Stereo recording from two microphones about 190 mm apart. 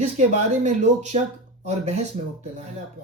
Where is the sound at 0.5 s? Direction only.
40° right (ahead or behind).